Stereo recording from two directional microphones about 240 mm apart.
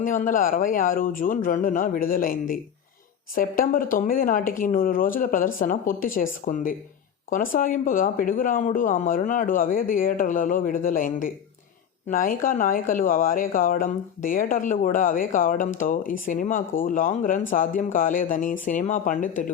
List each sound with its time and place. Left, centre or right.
0.0 s speech: left